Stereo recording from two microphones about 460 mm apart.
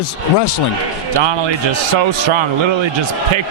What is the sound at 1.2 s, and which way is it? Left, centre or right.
Speech, right.